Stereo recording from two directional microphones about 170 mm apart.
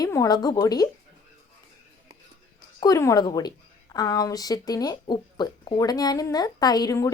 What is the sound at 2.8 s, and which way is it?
A woman's voice, 20° left (ahead or behind).